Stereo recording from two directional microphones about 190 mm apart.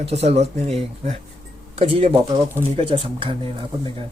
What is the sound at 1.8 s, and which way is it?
Speech, 30° right (ahead or behind).